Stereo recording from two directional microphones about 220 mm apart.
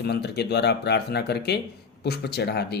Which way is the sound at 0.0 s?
50° left (ahead or behind).